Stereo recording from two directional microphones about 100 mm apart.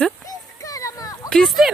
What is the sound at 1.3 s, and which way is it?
Speech, 5° left (ahead or behind).